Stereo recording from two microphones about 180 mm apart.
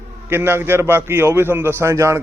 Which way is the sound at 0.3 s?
10° right (ahead or behind).